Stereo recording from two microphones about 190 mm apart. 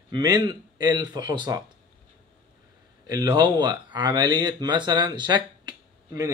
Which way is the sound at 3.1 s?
20° right (ahead or behind).